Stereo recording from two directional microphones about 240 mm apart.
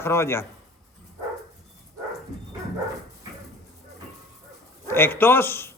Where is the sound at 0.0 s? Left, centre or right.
Centre.